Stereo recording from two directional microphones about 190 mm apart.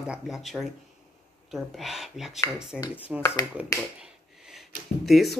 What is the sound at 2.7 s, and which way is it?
Speech, 15° left (ahead or behind).